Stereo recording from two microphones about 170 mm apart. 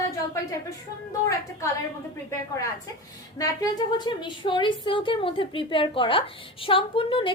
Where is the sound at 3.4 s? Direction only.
25° left (ahead or behind).